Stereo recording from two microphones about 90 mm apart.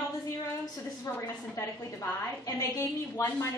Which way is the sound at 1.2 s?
35° left (ahead or behind).